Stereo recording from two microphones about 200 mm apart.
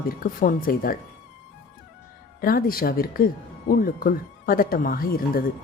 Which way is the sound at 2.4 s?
45° left (ahead or behind).